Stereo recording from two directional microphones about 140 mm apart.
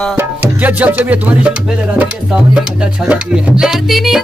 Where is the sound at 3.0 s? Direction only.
5° right (ahead or behind).